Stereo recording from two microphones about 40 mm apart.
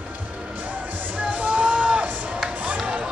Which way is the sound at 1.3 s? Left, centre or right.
Right.